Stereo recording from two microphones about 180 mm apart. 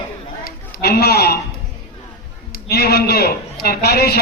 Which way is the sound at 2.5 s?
60° left (ahead or behind).